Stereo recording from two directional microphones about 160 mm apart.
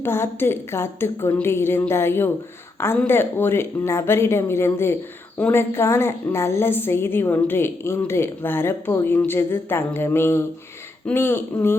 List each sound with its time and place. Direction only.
0.0 s a woman's voice: 15° left (ahead or behind)